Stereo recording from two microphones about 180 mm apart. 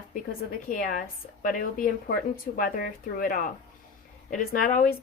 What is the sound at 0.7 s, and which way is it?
Speech, 50° left (ahead or behind).